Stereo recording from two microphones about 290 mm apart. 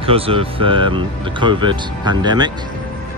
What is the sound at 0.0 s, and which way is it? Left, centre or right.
Speech, centre.